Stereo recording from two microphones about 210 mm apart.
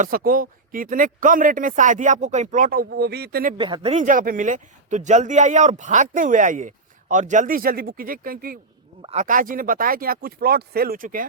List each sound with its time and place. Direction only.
0.0 s speech: 45° right (ahead or behind)
3.6 s speech: 25° right (ahead or behind); by 8.5 s 45° right (ahead or behind)
9.0 s speech: 30° right (ahead or behind)